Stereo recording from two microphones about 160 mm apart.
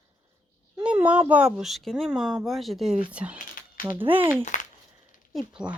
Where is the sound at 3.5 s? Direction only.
60° left (ahead or behind).